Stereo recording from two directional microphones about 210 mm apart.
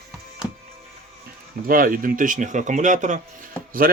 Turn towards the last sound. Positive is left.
turn(degrees=-45)  # may be behind; listen again after turning